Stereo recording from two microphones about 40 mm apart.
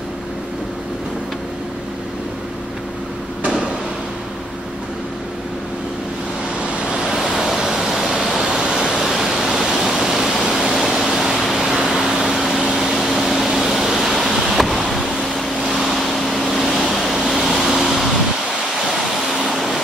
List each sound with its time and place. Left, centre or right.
6.7 s waves: right
7.0 s waves: centre
8.6 s pink noise: right
8.9 s waterfall: centre
9.2 s pink noise: centre
11.1 s a sound: centre
11.5 s a sound: centre
12.0 s air conditioning: centre
12.3 s a sound: centre
14.9 s vehicle: centre
16.4 s vehicle: centre